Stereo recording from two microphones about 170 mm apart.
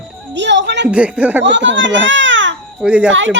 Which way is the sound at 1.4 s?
90° right.